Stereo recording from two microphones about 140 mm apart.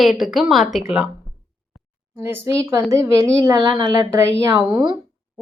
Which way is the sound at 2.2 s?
20° right (ahead or behind).